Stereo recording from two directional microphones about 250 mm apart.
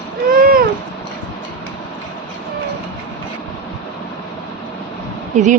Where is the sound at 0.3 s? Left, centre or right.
Right.